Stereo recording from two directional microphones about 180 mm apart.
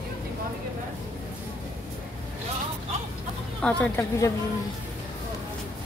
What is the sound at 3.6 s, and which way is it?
Speech, 10° left (ahead or behind).